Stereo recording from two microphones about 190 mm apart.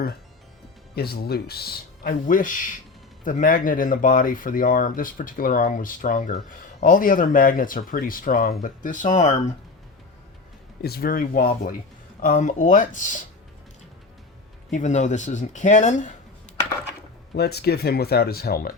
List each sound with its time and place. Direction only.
0.9 s speech: 55° left (ahead or behind); by 9.3 s 40° left (ahead or behind)
10.8 s speech: 55° left (ahead or behind)
14.7 s speech: 40° left (ahead or behind)
17.3 s speech: 60° left (ahead or behind)